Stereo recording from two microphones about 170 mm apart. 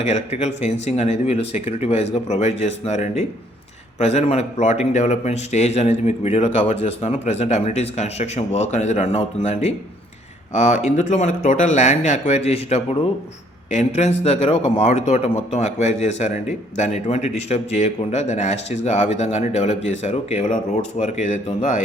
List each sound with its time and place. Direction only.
0.0 s speech: 40° left (ahead or behind)